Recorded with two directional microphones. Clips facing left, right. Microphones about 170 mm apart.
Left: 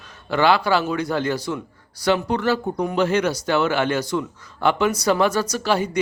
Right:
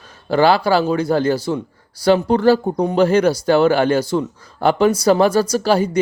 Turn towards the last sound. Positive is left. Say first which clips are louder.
# right 6 dB
turn(degrees=-35)  # may be behind; listen again after turning